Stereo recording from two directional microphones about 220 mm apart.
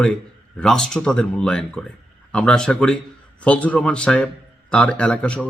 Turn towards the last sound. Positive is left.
turn(degrees=5)  # may be behind; listen again after turning